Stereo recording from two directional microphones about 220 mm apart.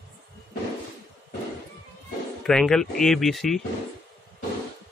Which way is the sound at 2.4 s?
Centre (ahead or behind).